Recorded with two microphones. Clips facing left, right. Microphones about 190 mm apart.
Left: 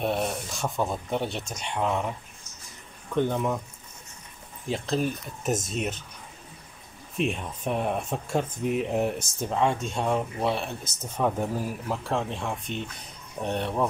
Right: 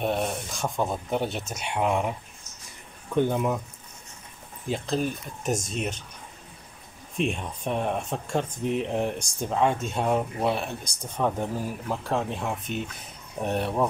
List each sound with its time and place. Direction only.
0.0 s speech: centre (ahead or behind)
3.2 s speech: 5° right (ahead or behind)
4.6 s speech: centre (ahead or behind)
7.2 s speech: centre (ahead or behind)